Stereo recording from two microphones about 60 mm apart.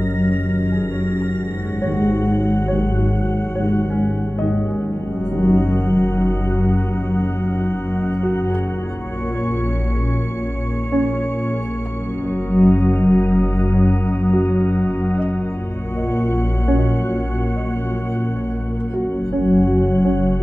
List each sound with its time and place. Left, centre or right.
0.2 s music: left
5.4 s music: left
12.5 s music: left
19.4 s music: left